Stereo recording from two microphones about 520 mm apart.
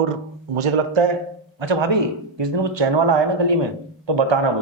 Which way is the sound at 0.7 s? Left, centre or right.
Right.